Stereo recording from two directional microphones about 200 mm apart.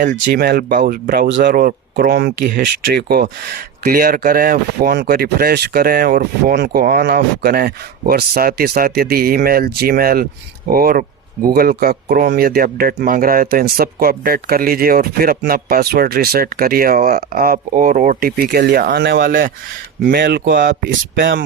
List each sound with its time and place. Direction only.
0.0 s speech: 45° right (ahead or behind)